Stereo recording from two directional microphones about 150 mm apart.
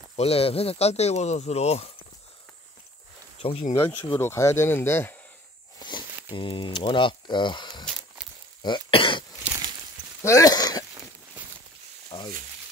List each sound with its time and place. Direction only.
0.1 s speech: 40° left (ahead or behind)
3.7 s speech: 15° left (ahead or behind)
5.8 s snake: 30° left (ahead or behind)
6.3 s speech: 35° left (ahead or behind)
8.2 s a sound: 5° right (ahead or behind)
8.6 s speech: 35° left (ahead or behind)
9.5 s a sound: 30° right (ahead or behind)
10.2 s speech: 20° left (ahead or behind)
12.1 s frying: 30° left (ahead or behind)